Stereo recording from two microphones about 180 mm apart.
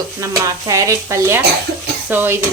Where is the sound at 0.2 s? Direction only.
20° right (ahead or behind).